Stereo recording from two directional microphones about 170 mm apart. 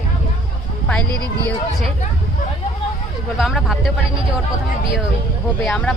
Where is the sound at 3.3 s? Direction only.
Centre (ahead or behind).